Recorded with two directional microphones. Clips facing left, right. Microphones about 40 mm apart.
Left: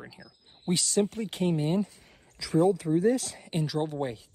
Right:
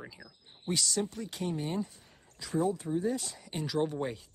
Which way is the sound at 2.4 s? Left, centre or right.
Left.